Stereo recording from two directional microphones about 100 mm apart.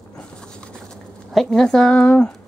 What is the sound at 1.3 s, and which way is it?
Speech, 5° left (ahead or behind).